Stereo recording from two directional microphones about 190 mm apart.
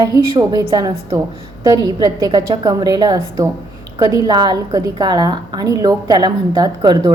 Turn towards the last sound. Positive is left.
turn(degrees=-20)  # may be behind; listen again after turning